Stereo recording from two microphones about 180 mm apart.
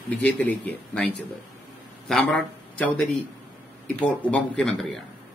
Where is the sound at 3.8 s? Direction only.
10° left (ahead or behind).